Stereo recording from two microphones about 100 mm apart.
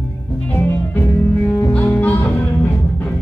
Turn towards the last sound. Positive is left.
turn(degrees=20)  # may be behind; listen again after turning